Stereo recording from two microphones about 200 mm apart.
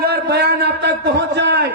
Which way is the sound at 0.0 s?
55° right (ahead or behind).